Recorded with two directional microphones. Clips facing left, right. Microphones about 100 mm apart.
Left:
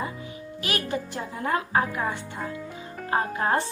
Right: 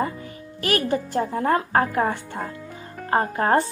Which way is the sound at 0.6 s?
45° right (ahead or behind).